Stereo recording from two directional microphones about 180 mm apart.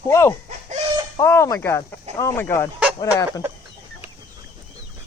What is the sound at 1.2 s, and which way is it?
Speech, 15° left (ahead or behind).